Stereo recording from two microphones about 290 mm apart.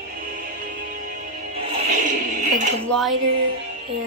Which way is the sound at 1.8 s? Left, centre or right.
Right.